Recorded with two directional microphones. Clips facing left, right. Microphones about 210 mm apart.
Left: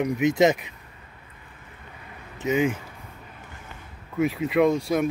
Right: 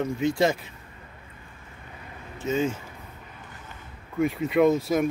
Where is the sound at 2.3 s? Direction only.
15° left (ahead or behind).